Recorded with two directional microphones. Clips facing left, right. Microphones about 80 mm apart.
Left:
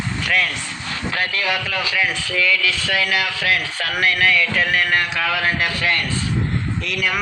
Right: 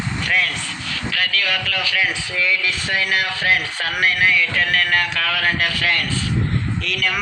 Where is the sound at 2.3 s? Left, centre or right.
Right.